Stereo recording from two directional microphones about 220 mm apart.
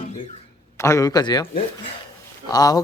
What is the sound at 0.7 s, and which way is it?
Speech, 15° left (ahead or behind).